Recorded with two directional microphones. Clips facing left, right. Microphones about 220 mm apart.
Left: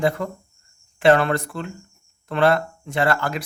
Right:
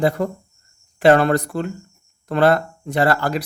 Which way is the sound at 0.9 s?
40° right (ahead or behind).